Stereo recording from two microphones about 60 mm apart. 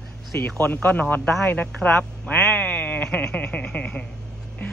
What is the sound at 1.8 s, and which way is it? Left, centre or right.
Speech, left.